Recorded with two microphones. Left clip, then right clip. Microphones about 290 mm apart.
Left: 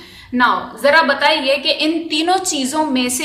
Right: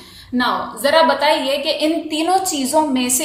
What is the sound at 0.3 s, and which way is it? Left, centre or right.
A woman's voice, left.